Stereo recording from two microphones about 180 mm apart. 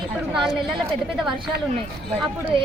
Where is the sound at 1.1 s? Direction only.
Centre (ahead or behind).